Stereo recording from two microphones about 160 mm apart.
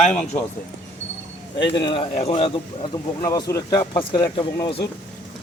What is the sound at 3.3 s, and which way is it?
Speech, 20° left (ahead or behind).